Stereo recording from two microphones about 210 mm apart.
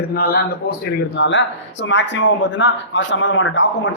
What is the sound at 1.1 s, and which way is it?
A man's voice, 60° left (ahead or behind).